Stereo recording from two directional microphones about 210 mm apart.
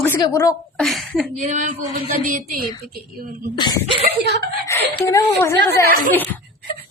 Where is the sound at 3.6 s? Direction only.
20° left (ahead or behind).